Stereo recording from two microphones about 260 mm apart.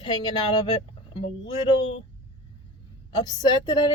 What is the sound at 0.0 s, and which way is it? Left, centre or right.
Speech, centre.